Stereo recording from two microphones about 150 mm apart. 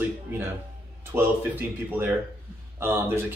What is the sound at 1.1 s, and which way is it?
A man's voice, 15° right (ahead or behind).